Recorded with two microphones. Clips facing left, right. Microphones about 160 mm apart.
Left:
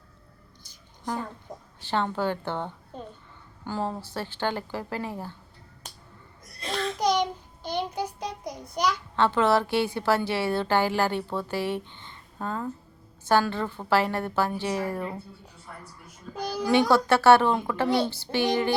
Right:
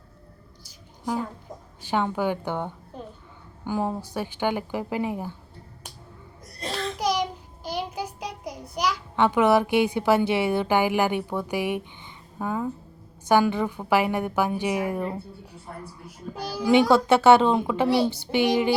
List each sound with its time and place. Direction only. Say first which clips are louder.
0.6 s a sound: right 3 dB; 10° right (ahead or behind)
1.8 s a woman's voice: right 2 dB; 10° right (ahead or behind)
7.0 s child singing: left 1 dB; 5° right (ahead or behind)
13.2 s a woman's voice: right 3 dB; 15° right (ahead or behind)
16.4 s a child's voice: left 2 dB; 5° right (ahead or behind)
16.9 s speech: right 1 dB; 20° right (ahead or behind)
17.8 s a child's voice: right 2 dB; 5° right (ahead or behind)
18.1 s a woman's voice: right 3 dB; 20° right (ahead or behind)